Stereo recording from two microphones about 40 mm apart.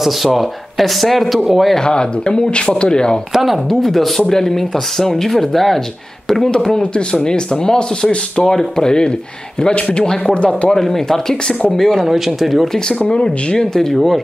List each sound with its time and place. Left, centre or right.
0.0 s speech: centre
1.4 s speech: centre
1.8 s speech: left
3.3 s speech: centre; by 10.7 s left
10.7 s speech: centre
12.1 s speech: centre
13.1 s speech: left
13.9 s speech: centre